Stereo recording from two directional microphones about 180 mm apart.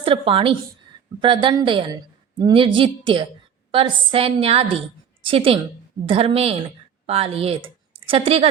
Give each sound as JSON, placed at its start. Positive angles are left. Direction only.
{"t": 0.0, "sound": "a woman's voice", "side_deg": -30}